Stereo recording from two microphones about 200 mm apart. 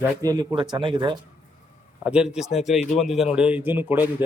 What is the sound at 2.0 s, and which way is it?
Speech, 5° right (ahead or behind).